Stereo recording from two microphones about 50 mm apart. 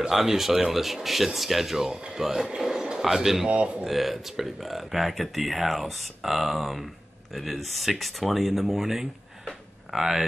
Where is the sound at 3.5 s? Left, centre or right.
Right.